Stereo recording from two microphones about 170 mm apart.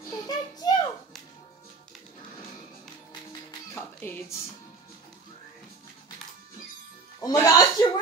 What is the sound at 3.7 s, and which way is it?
Music, 15° left (ahead or behind).